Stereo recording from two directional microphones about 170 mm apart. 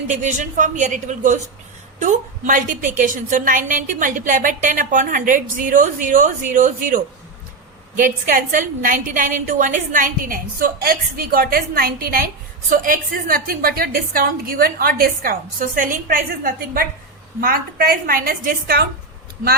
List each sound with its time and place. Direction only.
0.1 s a woman's voice: 45° right (ahead or behind); by 18.9 s 60° right (ahead or behind)